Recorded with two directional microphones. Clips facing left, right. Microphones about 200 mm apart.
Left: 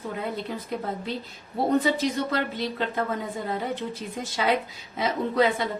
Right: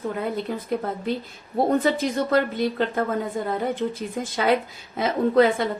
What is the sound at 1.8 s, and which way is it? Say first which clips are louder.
A woman's voice: right 2 dB; 50° right (ahead or behind).